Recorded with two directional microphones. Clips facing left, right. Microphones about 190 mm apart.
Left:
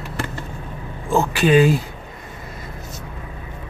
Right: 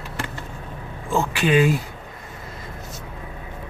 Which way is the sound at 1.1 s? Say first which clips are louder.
Left 4 dB; 40° left (ahead or behind).